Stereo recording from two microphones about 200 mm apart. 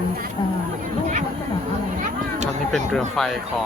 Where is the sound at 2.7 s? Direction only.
Centre (ahead or behind).